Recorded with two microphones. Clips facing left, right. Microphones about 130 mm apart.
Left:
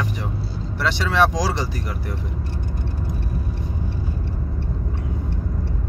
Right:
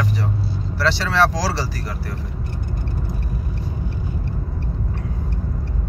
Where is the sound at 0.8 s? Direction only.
15° left (ahead or behind).